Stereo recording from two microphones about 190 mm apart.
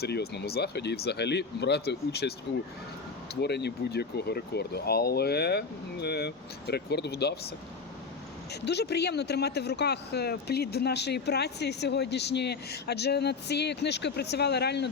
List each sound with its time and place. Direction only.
0.0 s speech: 55° left (ahead or behind)
3.4 s speech: 60° left (ahead or behind)
8.6 s speech: 60° left (ahead or behind)